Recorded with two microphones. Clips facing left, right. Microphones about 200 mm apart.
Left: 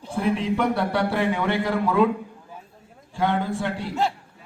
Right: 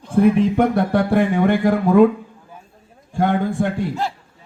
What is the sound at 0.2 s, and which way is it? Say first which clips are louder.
Speech: right 8 dB; 50° right (ahead or behind).